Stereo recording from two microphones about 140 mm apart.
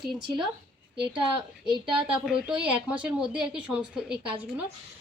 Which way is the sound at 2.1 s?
5° right (ahead or behind).